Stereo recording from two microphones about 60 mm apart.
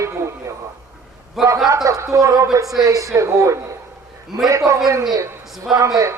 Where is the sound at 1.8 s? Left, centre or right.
Right.